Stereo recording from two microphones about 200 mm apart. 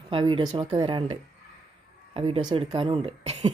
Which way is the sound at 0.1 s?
25° right (ahead or behind).